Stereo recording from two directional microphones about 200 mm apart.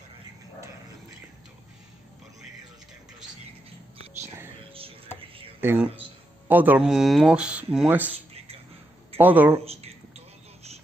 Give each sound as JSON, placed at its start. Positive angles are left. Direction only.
{"t": 5.6, "sound": "speech", "side_deg": -10}
{"t": 9.2, "sound": "speech", "side_deg": -10}
{"t": 9.7, "sound": "a sound", "side_deg": -30}